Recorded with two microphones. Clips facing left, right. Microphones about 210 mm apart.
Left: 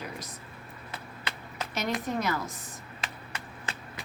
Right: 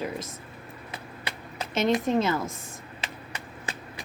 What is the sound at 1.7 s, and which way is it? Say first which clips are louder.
Speech: right 8 dB; 25° right (ahead or behind).